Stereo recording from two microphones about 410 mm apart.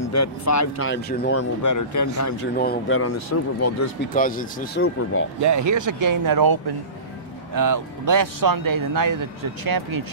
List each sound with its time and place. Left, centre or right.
0.0 s speech: left
0.8 s speech: left
1.4 s speech: left
2.5 s speech: left
3.0 s speech: left
4.1 s speech: centre
5.4 s speech: right